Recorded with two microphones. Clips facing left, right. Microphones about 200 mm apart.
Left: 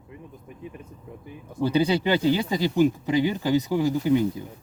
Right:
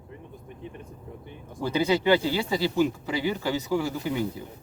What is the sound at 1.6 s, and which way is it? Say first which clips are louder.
Speech: left 2 dB; 15° left (ahead or behind).